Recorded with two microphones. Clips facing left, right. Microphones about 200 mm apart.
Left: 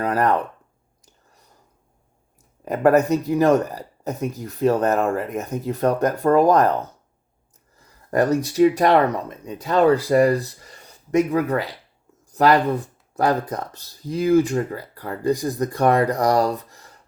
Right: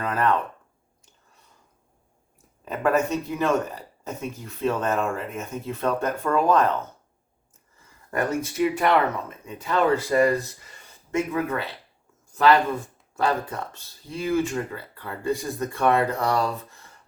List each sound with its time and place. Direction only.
0.0 s speech: 35° left (ahead or behind)
2.6 s speech: 40° left (ahead or behind)